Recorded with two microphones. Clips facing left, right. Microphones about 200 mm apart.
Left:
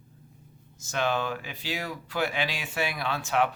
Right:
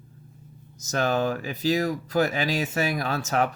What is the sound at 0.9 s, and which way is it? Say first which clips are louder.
Speech: right 4 dB; 40° right (ahead or behind).